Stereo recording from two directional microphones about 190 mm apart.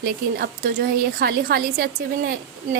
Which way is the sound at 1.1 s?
55° right (ahead or behind).